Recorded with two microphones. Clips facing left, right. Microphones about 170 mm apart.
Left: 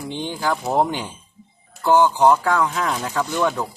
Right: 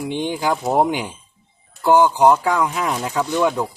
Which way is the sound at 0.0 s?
15° right (ahead or behind).